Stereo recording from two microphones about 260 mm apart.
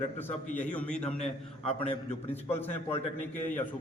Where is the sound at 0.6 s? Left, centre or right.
Centre.